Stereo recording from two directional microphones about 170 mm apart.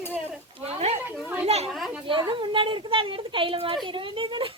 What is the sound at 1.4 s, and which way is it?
Children playing, 35° right (ahead or behind).